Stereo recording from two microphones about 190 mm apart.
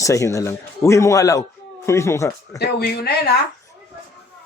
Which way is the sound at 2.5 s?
55° left (ahead or behind).